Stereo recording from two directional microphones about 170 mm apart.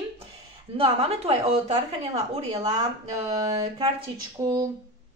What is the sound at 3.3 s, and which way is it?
Speech, 40° right (ahead or behind).